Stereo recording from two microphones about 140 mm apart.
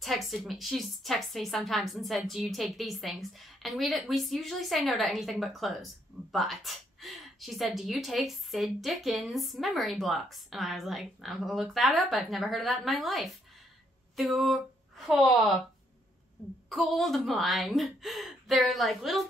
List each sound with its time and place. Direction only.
0.0 s a woman's voice: centre (ahead or behind)
16.6 s speech: centre (ahead or behind)